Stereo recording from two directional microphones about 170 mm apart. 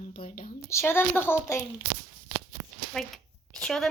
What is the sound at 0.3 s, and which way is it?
Speech, 55° left (ahead or behind).